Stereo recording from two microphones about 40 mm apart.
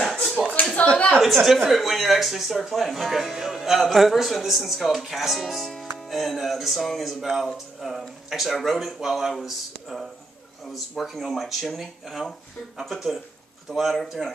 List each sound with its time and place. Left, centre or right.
0.0 s a sound: centre
0.9 s a woman's voice: left
1.2 s a woman's voice: centre
13.7 s a woman's voice: centre